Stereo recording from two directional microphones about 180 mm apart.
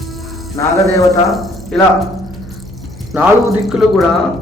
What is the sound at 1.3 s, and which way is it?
Speech, centre (ahead or behind).